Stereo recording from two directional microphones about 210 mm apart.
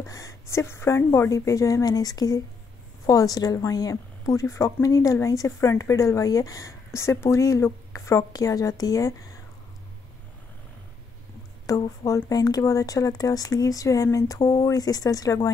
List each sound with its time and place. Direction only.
0.0 s a woman's voice: 15° left (ahead or behind)
11.6 s a woman's voice: 15° left (ahead or behind)